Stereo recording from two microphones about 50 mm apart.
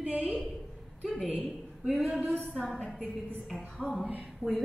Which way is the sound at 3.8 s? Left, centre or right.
Right.